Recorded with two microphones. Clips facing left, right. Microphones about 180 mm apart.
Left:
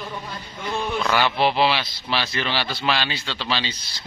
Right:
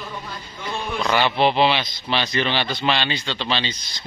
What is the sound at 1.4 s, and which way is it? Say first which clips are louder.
Speech: right 2 dB; 5° left (ahead or behind).